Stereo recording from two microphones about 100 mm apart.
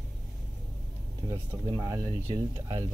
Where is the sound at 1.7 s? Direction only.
40° right (ahead or behind).